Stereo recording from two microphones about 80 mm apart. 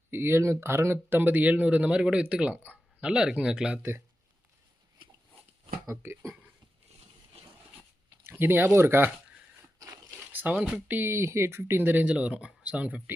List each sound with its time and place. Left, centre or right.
0.1 s speech: right; by 3.8 s centre
5.9 s speech: right
8.2 s speech: right
9.7 s a sound: right
10.3 s speech: centre
10.8 s speech: right